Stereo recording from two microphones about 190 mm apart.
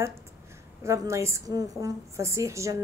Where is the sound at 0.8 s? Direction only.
15° right (ahead or behind).